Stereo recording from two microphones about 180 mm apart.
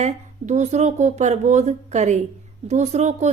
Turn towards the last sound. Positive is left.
turn(degrees=-40)  # may be behind; listen again after turning